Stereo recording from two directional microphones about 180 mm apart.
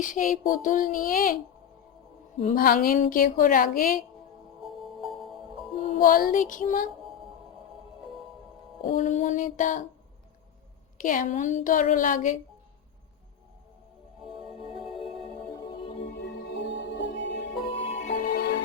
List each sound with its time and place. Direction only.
0.0 s a woman's voice: 45° left (ahead or behind)
2.4 s a woman's voice: 45° left (ahead or behind)
4.6 s music: centre (ahead or behind)
6.0 s a woman's voice: 50° left (ahead or behind)
8.8 s a woman's voice: 45° left (ahead or behind)
10.9 s a woman's voice: 50° left (ahead or behind)
14.3 s music: centre (ahead or behind)
15.7 s music: 30° left (ahead or behind)
16.2 s music: 70° left (ahead or behind)
17.7 s music: 30° left (ahead or behind)
17.9 s music: 45° left (ahead or behind); by 18.6 s 70° left (ahead or behind)